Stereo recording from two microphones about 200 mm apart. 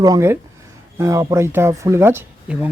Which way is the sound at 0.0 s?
15° right (ahead or behind).